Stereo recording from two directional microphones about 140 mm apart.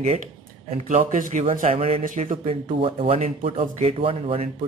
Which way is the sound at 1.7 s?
45° right (ahead or behind).